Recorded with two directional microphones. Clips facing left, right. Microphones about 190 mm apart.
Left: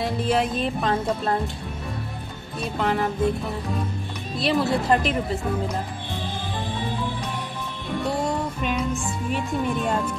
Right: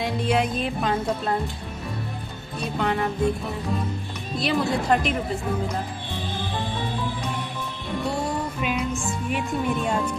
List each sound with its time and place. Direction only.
0.0 s music: centre (ahead or behind)
2.6 s speech: centre (ahead or behind)